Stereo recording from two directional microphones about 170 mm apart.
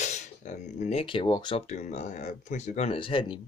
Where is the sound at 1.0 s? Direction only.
30° left (ahead or behind).